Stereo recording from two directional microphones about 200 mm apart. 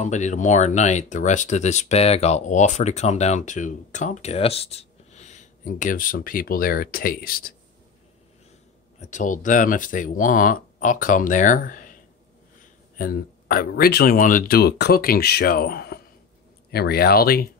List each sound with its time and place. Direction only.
0.0 s speech: 35° left (ahead or behind)
9.0 s speech: 40° left (ahead or behind)
12.9 s speech: 45° left (ahead or behind)